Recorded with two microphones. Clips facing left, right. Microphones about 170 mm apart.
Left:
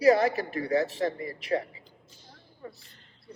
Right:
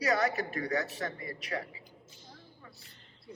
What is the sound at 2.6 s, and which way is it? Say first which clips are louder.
Speech: left 15 dB; 35° left (ahead or behind).